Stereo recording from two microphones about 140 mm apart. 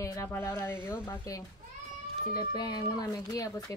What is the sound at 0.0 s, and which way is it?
Speech, 20° left (ahead or behind).